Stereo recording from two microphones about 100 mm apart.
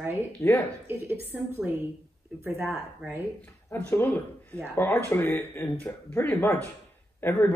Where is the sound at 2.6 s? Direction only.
5° right (ahead or behind).